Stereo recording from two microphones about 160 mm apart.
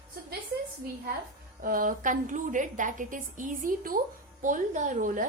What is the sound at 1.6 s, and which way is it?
Speech, 60° right (ahead or behind).